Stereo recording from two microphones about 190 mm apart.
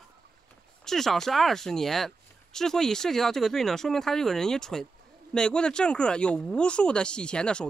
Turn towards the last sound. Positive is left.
turn(degrees=5)  # may be behind; listen again after turning